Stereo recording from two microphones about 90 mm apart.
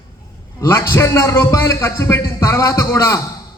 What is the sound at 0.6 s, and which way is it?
A man's voice, 30° left (ahead or behind).